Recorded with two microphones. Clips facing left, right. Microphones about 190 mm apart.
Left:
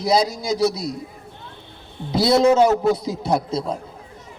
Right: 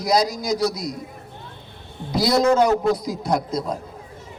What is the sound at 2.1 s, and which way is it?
A man's voice, 25° left (ahead or behind).